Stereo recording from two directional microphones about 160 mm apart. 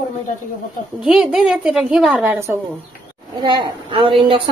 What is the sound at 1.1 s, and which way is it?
A woman's voice, 5° right (ahead or behind).